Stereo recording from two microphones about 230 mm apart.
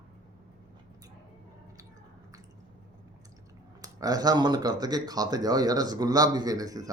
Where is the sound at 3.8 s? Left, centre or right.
Centre.